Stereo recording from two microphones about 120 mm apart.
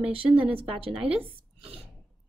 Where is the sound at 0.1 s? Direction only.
50° right (ahead or behind).